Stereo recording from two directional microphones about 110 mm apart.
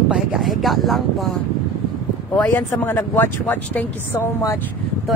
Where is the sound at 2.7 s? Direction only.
20° left (ahead or behind).